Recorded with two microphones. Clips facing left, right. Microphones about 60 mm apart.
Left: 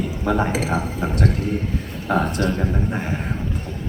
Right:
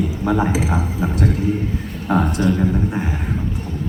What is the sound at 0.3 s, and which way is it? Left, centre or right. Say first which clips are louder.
Speech: right 1 dB; centre.